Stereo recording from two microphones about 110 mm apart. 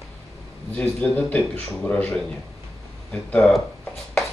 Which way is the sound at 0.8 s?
10° left (ahead or behind).